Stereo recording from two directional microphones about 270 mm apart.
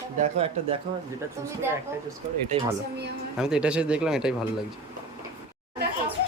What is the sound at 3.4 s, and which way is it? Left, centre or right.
Speech, centre.